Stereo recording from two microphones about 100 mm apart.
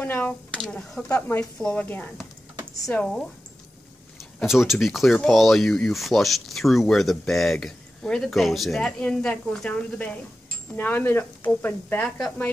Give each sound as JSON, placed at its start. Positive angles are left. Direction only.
{"t": 0.0, "sound": "speech", "side_deg": 15}
{"t": 0.5, "sound": "speech", "side_deg": 5}
{"t": 1.0, "sound": "speech", "side_deg": 15}
{"t": 4.2, "sound": "speech", "side_deg": -5}